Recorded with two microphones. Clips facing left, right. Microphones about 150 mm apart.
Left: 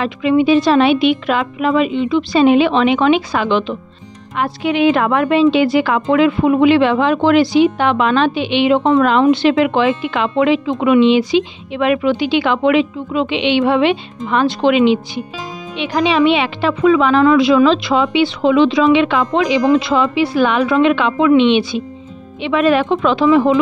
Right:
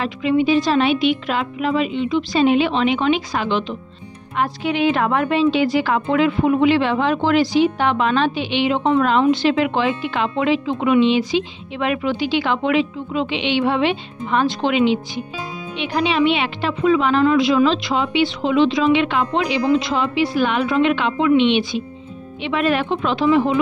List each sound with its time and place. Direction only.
0.0 s a woman's voice: 85° left